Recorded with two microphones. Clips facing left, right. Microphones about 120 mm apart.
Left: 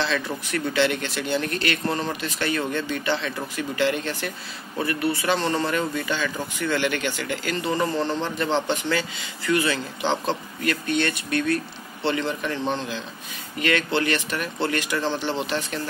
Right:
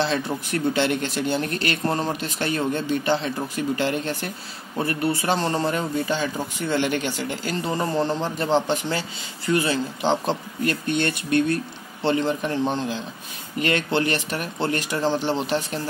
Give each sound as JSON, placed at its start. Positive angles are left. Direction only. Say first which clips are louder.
{"t": 0.0, "sound": "speech", "louder": "right 2 dB", "side_deg": -45}
{"t": 13.6, "sound": "speech", "louder": "right 1 dB", "side_deg": -45}